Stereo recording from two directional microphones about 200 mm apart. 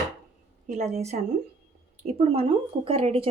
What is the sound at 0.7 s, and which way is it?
A woman's voice, 35° right (ahead or behind).